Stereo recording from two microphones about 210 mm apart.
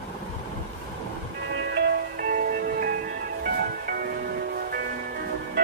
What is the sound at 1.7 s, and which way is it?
Music, 50° right (ahead or behind).